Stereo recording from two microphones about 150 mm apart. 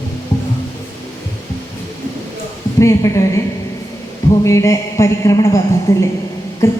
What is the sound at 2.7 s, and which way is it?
Speech, 20° left (ahead or behind).